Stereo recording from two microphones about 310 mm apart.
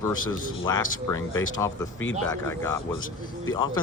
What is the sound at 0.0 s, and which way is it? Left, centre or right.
Speech, centre.